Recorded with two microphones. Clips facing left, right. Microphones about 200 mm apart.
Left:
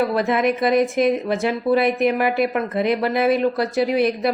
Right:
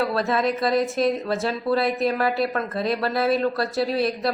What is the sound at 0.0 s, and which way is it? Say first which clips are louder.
A woman's voice: left 3 dB; 15° left (ahead or behind).